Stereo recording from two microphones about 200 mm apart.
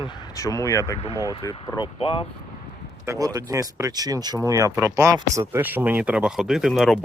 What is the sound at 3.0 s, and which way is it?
Speech, 15° right (ahead or behind).